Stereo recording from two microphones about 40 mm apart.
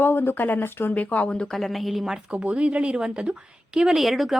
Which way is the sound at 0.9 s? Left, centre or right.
Left.